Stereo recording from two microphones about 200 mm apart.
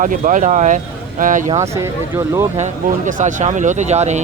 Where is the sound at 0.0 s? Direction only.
40° right (ahead or behind).